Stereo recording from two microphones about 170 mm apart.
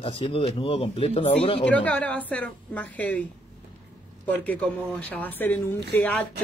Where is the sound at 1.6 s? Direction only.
10° left (ahead or behind).